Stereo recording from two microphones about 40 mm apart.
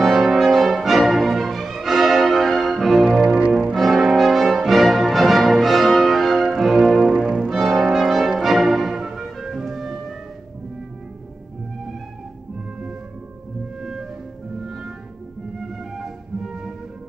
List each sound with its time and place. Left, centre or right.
0.0 s brass instrument: centre
3.1 s music: right
3.5 s music: centre
4.0 s brass instrument: centre
6.6 s music: centre
7.1 s music: right
7.9 s brass instrument: centre
8.4 s music: centre
13.7 s music: centre